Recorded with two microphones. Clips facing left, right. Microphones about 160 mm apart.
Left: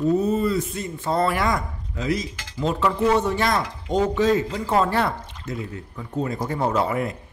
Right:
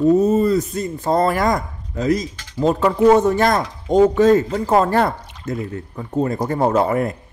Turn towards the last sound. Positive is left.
turn(degrees=-45)  # may be behind; listen again after turning